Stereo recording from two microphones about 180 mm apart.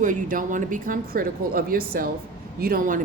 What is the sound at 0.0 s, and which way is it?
A woman's voice, 45° right (ahead or behind).